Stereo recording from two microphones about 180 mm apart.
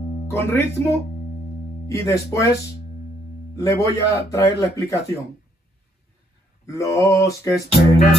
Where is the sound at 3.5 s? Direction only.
15° left (ahead or behind).